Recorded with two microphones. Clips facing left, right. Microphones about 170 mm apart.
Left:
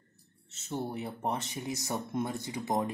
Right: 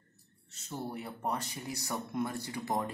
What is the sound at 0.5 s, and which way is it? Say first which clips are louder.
Speech: left 4 dB; 25° left (ahead or behind).